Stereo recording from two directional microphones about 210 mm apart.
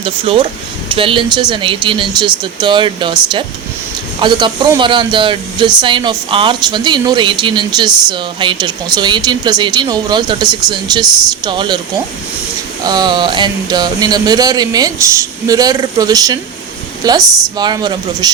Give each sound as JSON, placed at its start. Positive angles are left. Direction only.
{"t": 0.0, "sound": "speech", "side_deg": -25}
{"t": 12.8, "sound": "speech", "side_deg": -20}